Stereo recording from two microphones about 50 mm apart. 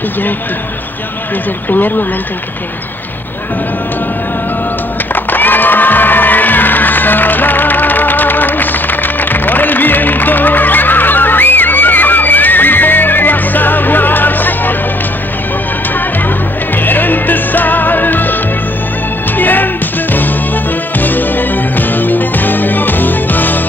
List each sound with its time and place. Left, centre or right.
1.7 s speech: left
5.1 s music: left
16.7 s music: left
19.3 s music: left